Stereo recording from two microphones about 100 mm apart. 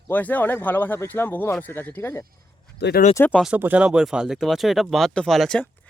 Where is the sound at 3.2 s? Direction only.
20° left (ahead or behind).